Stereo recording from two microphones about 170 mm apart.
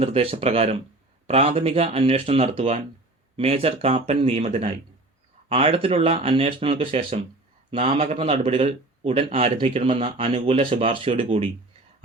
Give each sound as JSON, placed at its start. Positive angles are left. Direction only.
{"t": 0.0, "sound": "a man's voice", "side_deg": -35}